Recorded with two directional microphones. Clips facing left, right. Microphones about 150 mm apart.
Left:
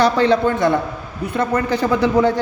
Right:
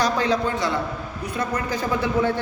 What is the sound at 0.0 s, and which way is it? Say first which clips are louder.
A man's voice: left 7 dB; 65° left (ahead or behind).